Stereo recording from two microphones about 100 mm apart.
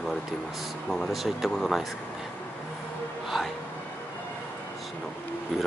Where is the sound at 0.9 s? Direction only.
Centre (ahead or behind).